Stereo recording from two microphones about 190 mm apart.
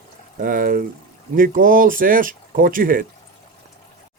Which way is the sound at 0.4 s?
45° right (ahead or behind).